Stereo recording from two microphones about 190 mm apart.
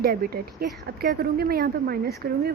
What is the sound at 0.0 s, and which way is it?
Speech, 50° right (ahead or behind).